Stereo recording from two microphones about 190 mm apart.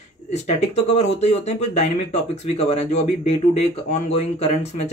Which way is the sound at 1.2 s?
35° left (ahead or behind).